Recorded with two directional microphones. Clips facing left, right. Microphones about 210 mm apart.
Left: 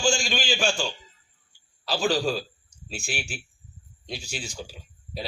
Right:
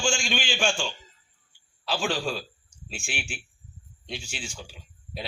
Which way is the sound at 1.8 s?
40° left (ahead or behind).